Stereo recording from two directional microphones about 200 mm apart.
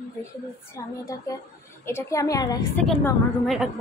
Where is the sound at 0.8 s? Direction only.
15° left (ahead or behind).